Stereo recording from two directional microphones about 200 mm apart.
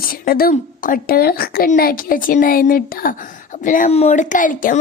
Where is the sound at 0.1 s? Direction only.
45° left (ahead or behind).